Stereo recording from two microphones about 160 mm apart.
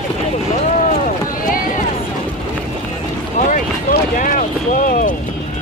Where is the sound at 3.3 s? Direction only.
60° left (ahead or behind).